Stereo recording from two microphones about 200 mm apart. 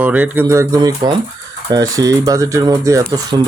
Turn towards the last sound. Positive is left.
turn(degrees=-15)  # may be behind; listen again after turning